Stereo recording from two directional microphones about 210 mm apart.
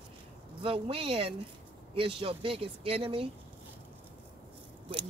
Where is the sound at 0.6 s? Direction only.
25° right (ahead or behind).